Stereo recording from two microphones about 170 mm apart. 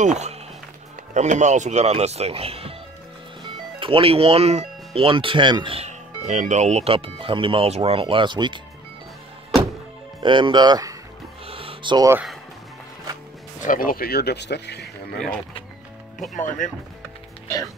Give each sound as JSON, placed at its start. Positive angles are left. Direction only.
{"t": 0.0, "sound": "speech", "side_deg": -40}
{"t": 3.8, "sound": "speech", "side_deg": -30}
{"t": 10.2, "sound": "speech", "side_deg": -30}
{"t": 11.4, "sound": "music", "side_deg": -35}
{"t": 13.6, "sound": "speech", "side_deg": 55}
{"t": 16.3, "sound": "speech", "side_deg": 45}